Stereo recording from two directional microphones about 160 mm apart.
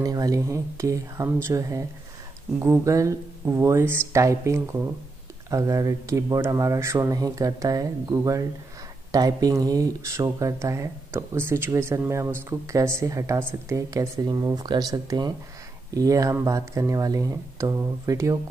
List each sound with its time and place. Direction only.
0.0 s speech: 20° right (ahead or behind)